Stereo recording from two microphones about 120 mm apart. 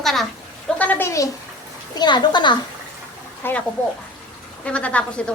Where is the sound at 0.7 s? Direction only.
15° left (ahead or behind).